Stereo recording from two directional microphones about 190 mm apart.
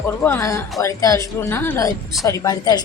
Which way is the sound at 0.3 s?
15° left (ahead or behind).